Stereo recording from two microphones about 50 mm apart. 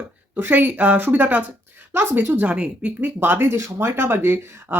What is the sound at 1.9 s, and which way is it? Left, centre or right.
Speech, right.